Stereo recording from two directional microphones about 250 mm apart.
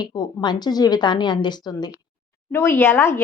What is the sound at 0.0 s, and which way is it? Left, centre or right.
Speech, centre.